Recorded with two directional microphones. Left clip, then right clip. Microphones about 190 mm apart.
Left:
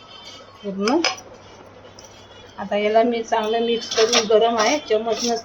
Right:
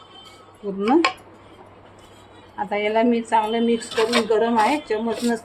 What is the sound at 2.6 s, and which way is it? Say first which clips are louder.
Speech: left 3 dB; 45° right (ahead or behind).